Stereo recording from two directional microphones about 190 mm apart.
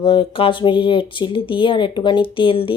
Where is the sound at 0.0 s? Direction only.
25° left (ahead or behind).